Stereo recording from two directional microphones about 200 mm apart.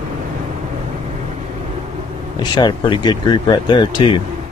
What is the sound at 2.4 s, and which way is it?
Speech, 25° left (ahead or behind).